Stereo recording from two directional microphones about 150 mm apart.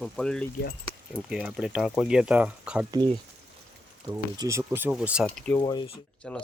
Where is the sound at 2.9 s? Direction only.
30° right (ahead or behind); by 5.2 s 5° right (ahead or behind).